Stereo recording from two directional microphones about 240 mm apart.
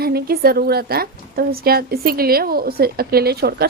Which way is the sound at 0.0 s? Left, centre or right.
Right.